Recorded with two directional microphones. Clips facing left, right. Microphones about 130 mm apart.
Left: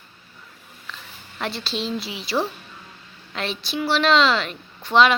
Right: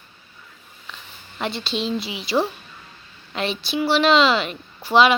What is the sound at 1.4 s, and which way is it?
A woman's voice, centre (ahead or behind).